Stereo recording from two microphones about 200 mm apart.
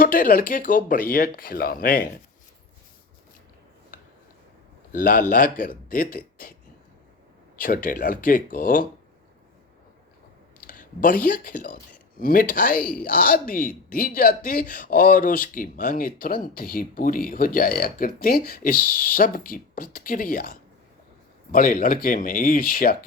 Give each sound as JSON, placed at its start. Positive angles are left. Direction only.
{"t": 0.0, "sound": "speech", "side_deg": 45}
{"t": 4.9, "sound": "speech", "side_deg": 40}
{"t": 7.5, "sound": "speech", "side_deg": 45}
{"t": 10.6, "sound": "speech", "side_deg": 45}